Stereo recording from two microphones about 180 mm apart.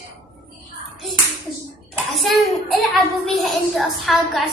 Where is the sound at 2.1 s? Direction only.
Centre (ahead or behind).